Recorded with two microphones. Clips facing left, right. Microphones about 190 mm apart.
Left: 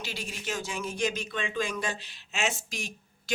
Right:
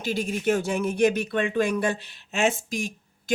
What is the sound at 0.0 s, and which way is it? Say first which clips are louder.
Speech: right 12 dB; 50° right (ahead or behind).